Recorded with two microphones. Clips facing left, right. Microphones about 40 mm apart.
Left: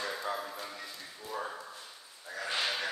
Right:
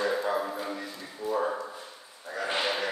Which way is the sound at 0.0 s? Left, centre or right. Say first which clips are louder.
Right 8 dB; right.